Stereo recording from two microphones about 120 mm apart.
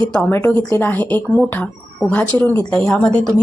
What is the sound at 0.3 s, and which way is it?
A woman's voice, 15° left (ahead or behind).